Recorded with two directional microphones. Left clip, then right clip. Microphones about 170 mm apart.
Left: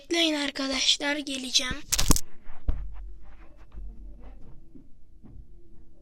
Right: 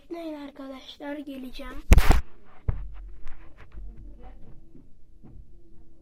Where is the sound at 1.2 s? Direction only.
5° left (ahead or behind).